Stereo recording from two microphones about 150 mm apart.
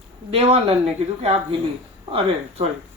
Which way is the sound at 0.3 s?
40° right (ahead or behind).